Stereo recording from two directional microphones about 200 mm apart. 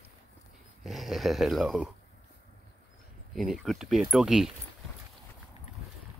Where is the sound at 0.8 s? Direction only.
Centre (ahead or behind).